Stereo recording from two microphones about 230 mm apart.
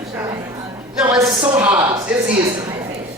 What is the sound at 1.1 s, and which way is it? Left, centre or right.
Speech, centre.